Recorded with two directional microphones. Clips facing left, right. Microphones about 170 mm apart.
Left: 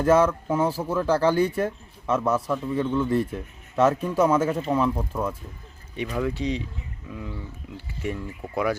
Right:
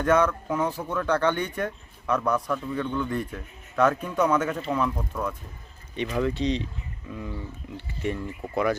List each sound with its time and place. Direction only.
0.0 s a man's voice: 30° left (ahead or behind)
6.0 s speech: 5° left (ahead or behind)